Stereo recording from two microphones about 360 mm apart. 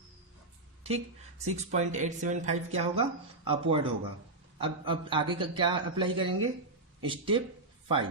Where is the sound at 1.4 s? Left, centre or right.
Centre.